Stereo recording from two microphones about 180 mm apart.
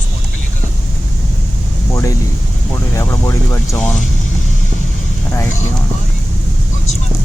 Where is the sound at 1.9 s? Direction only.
15° left (ahead or behind).